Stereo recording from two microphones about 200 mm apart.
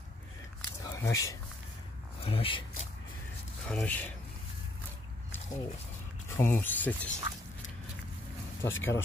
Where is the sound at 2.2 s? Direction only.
25° left (ahead or behind).